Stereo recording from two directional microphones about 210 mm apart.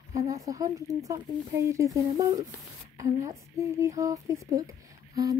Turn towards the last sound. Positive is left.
turn(degrees=-15)  # may be behind; listen again after turning